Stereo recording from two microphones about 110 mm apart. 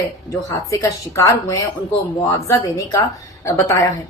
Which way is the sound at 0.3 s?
30° left (ahead or behind).